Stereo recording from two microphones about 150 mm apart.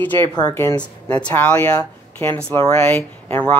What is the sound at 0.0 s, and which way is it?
Speech, 10° left (ahead or behind).